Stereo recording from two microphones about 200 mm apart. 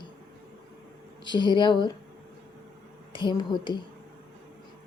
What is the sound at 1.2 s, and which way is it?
Speech, 20° left (ahead or behind).